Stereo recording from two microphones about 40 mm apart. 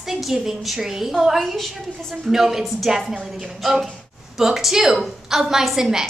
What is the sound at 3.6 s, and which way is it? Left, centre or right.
A woman's voice, centre.